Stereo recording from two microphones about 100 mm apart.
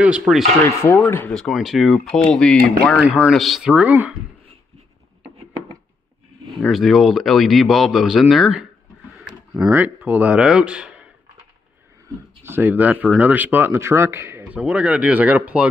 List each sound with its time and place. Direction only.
0.3 s speech: 20° right (ahead or behind)
0.7 s speech: 25° left (ahead or behind)
1.3 s speech: centre (ahead or behind)
3.0 s speech: 5° right (ahead or behind)
6.7 s speech: centre (ahead or behind)
9.2 s a sound: 5° right (ahead or behind)
9.7 s speech: 20° right (ahead or behind)
12.4 s speech: 20° right (ahead or behind)
14.6 s speech: 10° right (ahead or behind)